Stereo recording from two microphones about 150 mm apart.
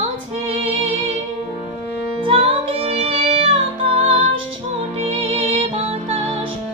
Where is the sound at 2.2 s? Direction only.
35° right (ahead or behind).